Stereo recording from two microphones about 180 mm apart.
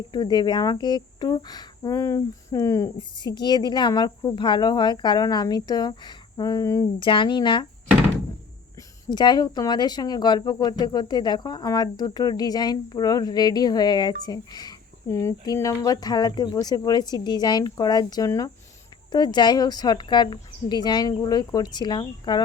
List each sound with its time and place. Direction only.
0.1 s speech: 25° left (ahead or behind)
9.0 s speech: 25° left (ahead or behind)